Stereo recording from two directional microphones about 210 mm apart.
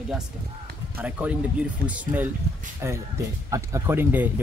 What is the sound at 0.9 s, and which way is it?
Speech, 5° right (ahead or behind).